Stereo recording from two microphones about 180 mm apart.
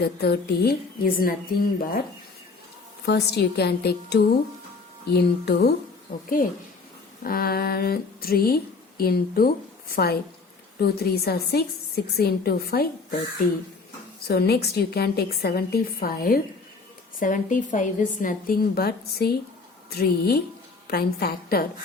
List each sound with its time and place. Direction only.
0.0 s speech: 65° left (ahead or behind)
3.1 s speech: 65° left (ahead or behind)
6.2 s a woman's voice: 50° left (ahead or behind)
14.3 s a woman's voice: 60° left (ahead or behind)